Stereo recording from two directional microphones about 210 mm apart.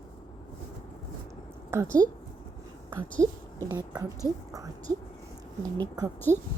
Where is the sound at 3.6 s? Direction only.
20° right (ahead or behind).